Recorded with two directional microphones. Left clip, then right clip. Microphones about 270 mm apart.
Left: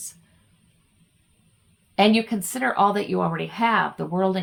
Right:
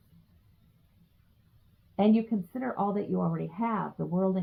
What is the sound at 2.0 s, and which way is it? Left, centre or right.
Speech, centre.